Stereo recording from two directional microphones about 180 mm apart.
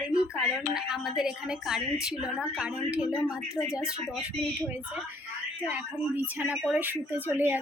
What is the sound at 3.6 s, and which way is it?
Speech, 20° left (ahead or behind).